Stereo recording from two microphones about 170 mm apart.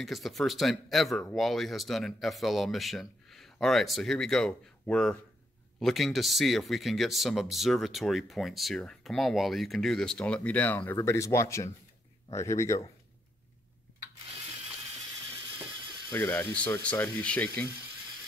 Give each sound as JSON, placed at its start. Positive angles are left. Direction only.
{"t": 0.0, "sound": "speech", "side_deg": 0}
{"t": 16.1, "sound": "speech", "side_deg": 10}